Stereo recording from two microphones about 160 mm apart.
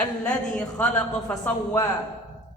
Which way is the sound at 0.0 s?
10° left (ahead or behind).